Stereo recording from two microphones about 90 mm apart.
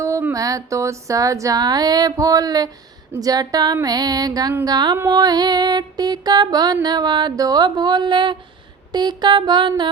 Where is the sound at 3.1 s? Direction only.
45° right (ahead or behind); by 8.3 s 60° right (ahead or behind).